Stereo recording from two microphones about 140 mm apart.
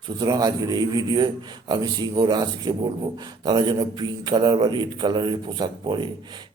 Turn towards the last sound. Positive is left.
turn(degrees=-35)  # may be behind; listen again after turning